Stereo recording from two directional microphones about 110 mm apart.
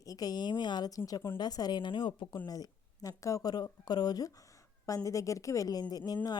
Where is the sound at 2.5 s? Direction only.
35° left (ahead or behind).